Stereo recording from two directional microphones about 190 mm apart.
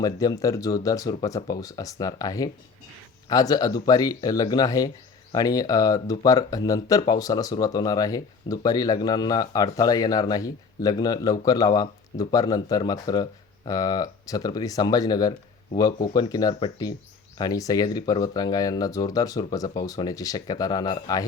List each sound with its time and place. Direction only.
0.0 s speech: 20° left (ahead or behind)